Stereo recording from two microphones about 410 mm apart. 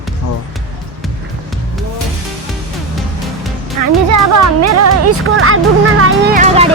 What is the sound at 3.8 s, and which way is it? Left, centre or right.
Speech, right.